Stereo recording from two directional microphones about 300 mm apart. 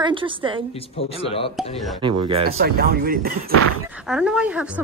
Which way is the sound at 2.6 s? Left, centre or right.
Right.